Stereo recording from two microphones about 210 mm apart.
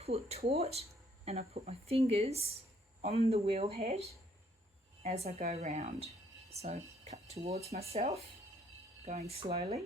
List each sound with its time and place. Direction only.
0.0 s speech: 30° right (ahead or behind)